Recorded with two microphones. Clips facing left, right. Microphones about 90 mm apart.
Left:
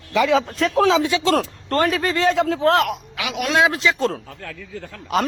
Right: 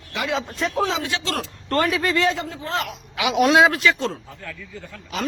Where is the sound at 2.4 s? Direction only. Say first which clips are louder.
Left 10 dB; 85° left; by 3.0 s 70° left (ahead or behind).